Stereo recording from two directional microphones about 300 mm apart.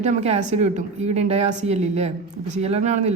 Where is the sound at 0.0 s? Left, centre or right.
Right.